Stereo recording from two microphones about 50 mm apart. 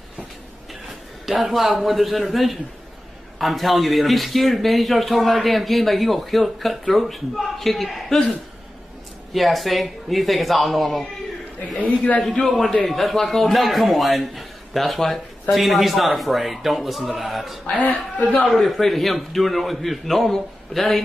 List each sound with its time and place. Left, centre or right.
1.2 s a man's voice: centre
9.3 s a man's voice: centre
12.4 s a man's voice: centre
17.8 s a woman's voice: left
18.5 s a man's voice: centre